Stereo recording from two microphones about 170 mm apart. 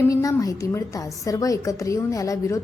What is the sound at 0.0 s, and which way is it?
Speech, 20° left (ahead or behind).